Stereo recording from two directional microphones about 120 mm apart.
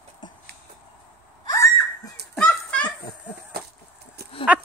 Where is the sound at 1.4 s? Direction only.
25° left (ahead or behind).